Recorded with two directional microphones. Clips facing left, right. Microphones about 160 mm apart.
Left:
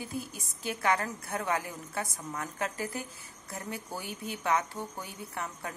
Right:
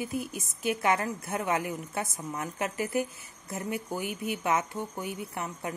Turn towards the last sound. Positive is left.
turn(degrees=-20)  # may be behind; listen again after turning